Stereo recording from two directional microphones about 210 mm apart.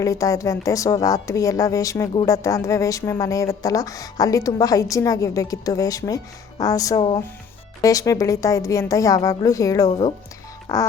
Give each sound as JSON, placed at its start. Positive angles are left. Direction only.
{"t": 0.0, "sound": "a woman's voice", "side_deg": 15}